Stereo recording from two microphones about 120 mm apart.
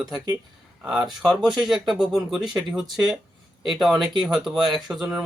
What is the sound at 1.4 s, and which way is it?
Speech, 5° right (ahead or behind).